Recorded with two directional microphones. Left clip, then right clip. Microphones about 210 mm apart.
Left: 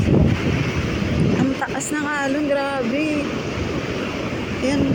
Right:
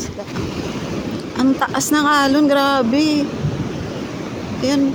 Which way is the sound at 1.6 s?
20° right (ahead or behind).